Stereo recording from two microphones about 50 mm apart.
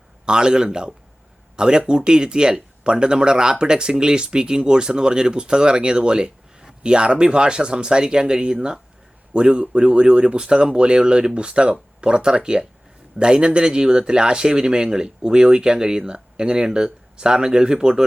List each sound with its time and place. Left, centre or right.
0.3 s speech: centre